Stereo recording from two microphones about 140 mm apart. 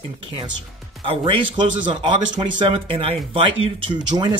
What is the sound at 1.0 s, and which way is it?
Speech, 35° right (ahead or behind).